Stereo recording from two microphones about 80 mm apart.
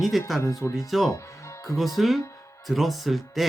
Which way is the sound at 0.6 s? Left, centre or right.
Left.